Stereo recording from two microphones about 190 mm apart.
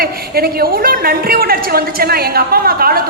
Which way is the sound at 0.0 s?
55° right (ahead or behind).